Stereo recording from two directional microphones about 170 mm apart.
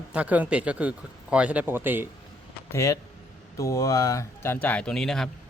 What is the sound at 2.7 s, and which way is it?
Speech, 20° left (ahead or behind).